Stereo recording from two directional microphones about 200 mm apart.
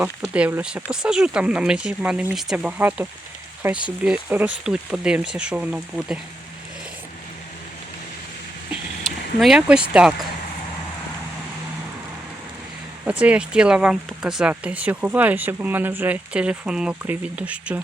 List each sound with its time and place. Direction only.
0.0 s speech: 5° right (ahead or behind)
9.4 s speech: 5° right (ahead or behind)
13.1 s speech: 5° right (ahead or behind)